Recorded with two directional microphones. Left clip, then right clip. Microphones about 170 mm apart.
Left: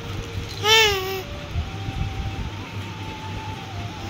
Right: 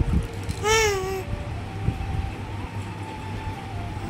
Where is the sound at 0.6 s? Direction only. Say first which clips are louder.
Left 4 dB; 15° right (ahead or behind).